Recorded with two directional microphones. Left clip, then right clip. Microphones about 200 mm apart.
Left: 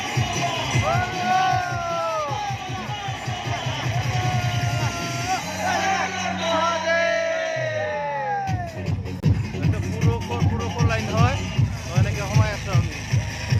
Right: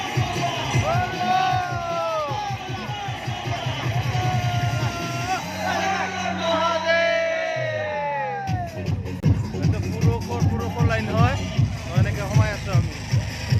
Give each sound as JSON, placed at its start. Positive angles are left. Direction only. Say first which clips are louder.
{"t": 0.2, "sound": "music", "louder": "left 1 dB", "side_deg": 40}
{"t": 1.4, "sound": "a sound", "louder": "left 1 dB", "side_deg": -5}
{"t": 5.6, "sound": "music", "louder": "left 1 dB", "side_deg": 40}
{"t": 6.8, "sound": "music", "louder": "right 1 dB", "side_deg": -15}
{"t": 10.1, "sound": "music", "louder": "even", "side_deg": 5}